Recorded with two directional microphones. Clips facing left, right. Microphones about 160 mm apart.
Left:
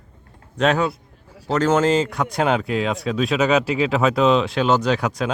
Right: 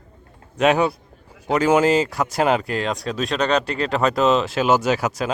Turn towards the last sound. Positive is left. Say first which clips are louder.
# even
turn(degrees=0)  # may be behind; listen again after turning